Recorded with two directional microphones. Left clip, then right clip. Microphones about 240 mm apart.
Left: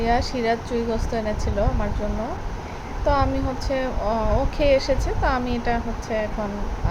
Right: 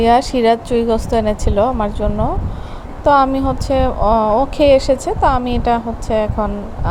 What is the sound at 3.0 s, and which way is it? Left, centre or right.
A woman's voice, right.